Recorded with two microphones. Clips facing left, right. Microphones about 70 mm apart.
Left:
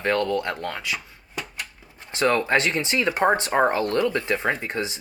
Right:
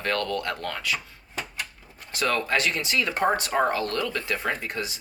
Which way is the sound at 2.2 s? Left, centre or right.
Left.